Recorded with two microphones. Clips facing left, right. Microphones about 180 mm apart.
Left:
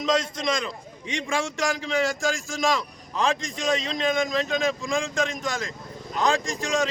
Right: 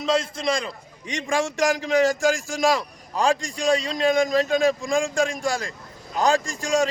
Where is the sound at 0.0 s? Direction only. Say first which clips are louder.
Right 1 dB; 30° right (ahead or behind).